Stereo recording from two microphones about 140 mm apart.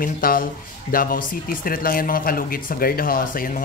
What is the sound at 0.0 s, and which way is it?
Speech, 90° left.